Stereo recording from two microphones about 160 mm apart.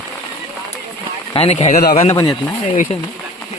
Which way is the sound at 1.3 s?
40° left (ahead or behind).